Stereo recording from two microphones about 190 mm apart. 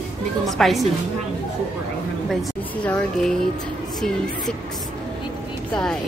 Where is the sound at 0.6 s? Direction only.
Centre (ahead or behind).